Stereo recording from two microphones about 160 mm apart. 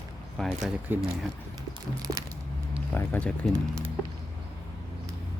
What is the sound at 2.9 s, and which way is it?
Speech, 10° left (ahead or behind).